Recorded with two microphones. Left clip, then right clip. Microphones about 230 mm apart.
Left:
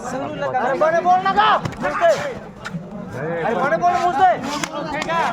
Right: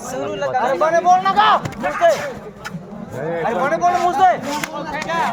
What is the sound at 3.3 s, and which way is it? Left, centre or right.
Speech, right.